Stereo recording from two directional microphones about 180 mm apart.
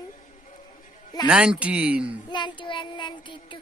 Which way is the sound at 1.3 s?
5° right (ahead or behind).